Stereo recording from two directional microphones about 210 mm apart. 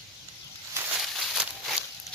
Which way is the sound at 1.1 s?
Centre (ahead or behind).